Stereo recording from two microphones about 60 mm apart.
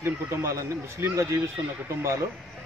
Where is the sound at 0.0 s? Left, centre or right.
Right.